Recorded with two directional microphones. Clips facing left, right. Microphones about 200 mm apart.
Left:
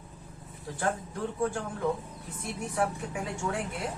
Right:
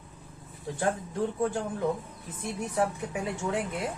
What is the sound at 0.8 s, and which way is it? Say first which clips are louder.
Speech: right 3 dB; 25° right (ahead or behind).